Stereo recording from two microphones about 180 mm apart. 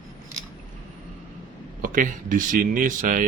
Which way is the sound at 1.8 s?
50° right (ahead or behind).